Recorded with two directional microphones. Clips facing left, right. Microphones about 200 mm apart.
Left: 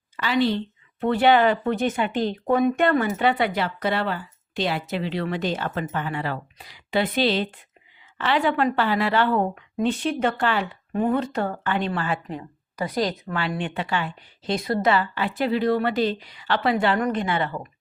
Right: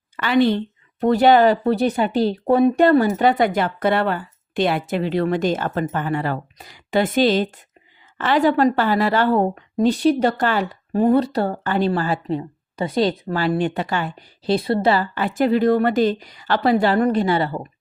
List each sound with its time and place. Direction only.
0.2 s a woman's voice: 55° right (ahead or behind); by 17.7 s 35° right (ahead or behind)